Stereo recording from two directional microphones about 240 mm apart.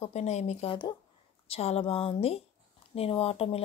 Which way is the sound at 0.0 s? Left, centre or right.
Left.